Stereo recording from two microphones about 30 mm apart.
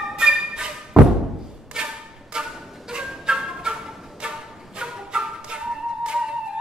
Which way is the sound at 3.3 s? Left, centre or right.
Right.